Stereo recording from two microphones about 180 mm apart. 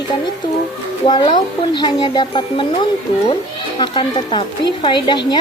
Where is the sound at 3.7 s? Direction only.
25° left (ahead or behind).